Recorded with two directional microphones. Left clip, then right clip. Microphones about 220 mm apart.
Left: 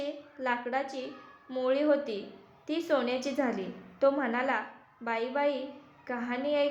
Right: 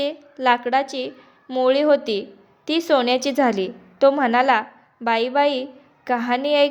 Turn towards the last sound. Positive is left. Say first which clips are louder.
# right 12 dB
turn(degrees=-40)  # may be behind; listen again after turning